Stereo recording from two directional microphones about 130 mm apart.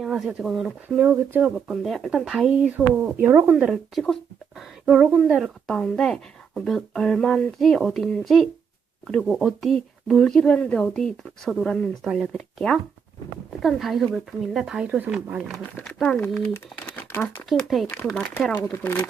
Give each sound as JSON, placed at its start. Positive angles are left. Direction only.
{"t": 0.0, "sound": "speech", "side_deg": -5}
{"t": 0.9, "sound": "speech", "side_deg": -15}
{"t": 5.6, "sound": "speech", "side_deg": 5}
{"t": 17.5, "sound": "speech", "side_deg": 0}
{"t": 17.8, "sound": "speech", "side_deg": 15}